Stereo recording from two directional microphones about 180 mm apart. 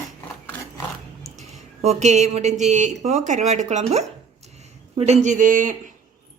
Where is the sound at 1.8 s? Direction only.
40° right (ahead or behind).